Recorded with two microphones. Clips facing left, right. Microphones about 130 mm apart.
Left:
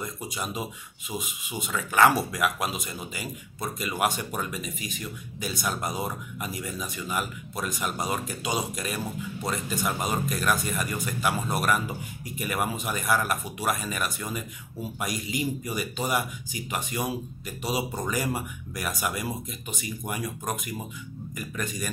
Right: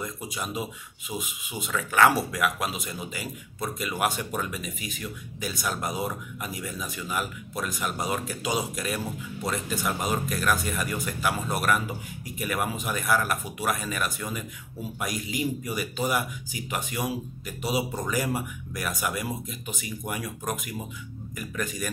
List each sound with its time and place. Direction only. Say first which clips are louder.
0.3 s speech: right 1 dB; centre (ahead or behind)
21.4 s speech: right 1 dB; centre (ahead or behind)